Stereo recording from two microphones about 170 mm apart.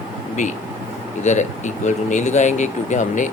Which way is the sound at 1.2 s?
45° left (ahead or behind).